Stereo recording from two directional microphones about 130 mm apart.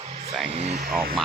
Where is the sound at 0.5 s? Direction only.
55° right (ahead or behind).